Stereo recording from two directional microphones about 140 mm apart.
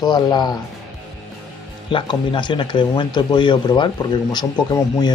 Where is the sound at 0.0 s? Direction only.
30° left (ahead or behind).